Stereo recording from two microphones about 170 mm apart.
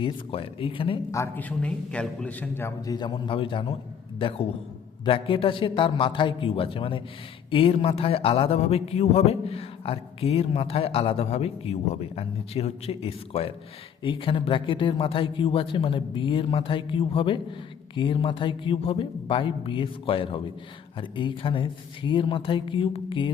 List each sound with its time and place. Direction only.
0.0 s speech: 30° left (ahead or behind)
1.1 s a man's voice: 10° left (ahead or behind); by 23.3 s 30° left (ahead or behind)